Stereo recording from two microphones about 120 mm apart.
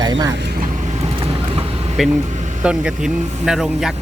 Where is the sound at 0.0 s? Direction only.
35° right (ahead or behind).